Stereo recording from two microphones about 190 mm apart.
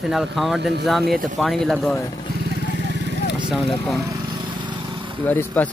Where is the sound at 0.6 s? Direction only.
60° right (ahead or behind).